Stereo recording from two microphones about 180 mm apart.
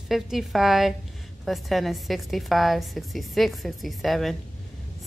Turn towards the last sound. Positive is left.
turn(degrees=0)  # may be behind; listen again after turning